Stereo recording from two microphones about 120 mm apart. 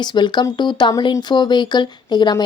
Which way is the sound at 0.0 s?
40° left (ahead or behind).